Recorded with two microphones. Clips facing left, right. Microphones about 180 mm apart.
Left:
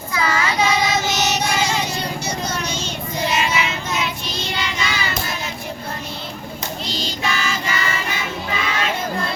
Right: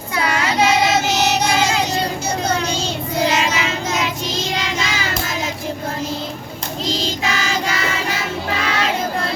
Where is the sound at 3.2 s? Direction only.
90° right.